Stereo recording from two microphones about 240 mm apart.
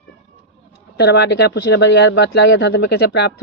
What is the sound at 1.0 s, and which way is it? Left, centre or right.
Speech, left.